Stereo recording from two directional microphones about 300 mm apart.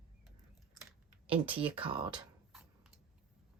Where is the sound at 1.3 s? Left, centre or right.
Centre.